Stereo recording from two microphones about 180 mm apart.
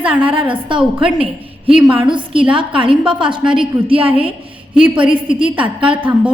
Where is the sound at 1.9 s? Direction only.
30° right (ahead or behind).